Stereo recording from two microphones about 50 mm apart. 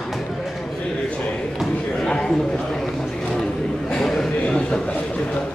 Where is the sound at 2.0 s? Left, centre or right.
Centre.